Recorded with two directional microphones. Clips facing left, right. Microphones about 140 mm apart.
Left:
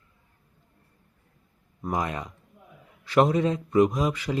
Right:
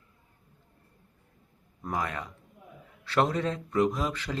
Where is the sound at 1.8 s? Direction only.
15° left (ahead or behind).